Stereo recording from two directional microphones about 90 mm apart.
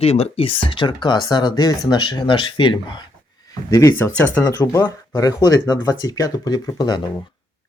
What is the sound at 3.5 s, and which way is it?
Speech, 40° left (ahead or behind).